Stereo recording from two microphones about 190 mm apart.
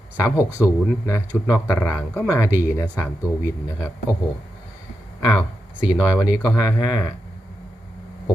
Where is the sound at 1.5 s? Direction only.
15° left (ahead or behind).